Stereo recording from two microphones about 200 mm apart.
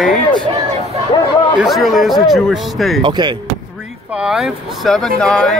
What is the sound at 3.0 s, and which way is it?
Speech, 25° right (ahead or behind).